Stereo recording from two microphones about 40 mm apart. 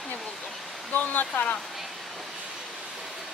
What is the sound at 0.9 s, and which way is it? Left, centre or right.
Speech, left.